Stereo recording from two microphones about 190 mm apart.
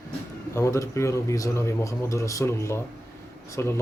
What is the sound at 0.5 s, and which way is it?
A man's voice, 15° left (ahead or behind).